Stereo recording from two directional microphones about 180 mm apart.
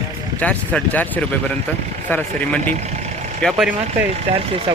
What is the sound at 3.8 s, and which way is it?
Speech, 35° right (ahead or behind).